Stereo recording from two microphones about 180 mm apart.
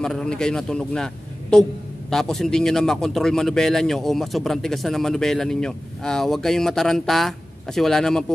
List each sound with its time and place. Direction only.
0.0 s a man's voice: 5° left (ahead or behind)